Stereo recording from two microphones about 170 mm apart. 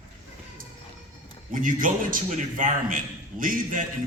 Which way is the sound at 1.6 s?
55° right (ahead or behind).